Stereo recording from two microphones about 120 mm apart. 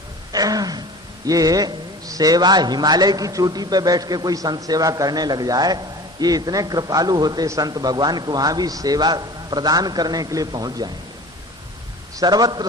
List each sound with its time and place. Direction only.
0.3 s a sound: 30° right (ahead or behind)
1.3 s a man's voice: 30° right (ahead or behind)
12.1 s a man's voice: 35° right (ahead or behind)